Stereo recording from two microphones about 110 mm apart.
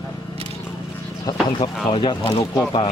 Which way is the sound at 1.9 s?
50° left (ahead or behind).